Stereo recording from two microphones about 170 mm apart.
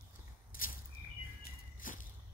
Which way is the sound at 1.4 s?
50° left (ahead or behind).